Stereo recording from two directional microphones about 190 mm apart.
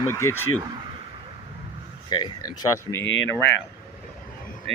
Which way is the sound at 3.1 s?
80° left.